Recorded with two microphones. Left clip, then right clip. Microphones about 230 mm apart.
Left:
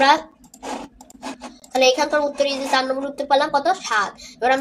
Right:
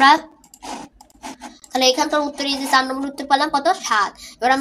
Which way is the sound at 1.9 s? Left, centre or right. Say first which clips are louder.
Even; right.